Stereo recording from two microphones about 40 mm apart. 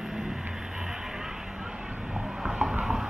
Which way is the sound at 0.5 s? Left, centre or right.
Centre.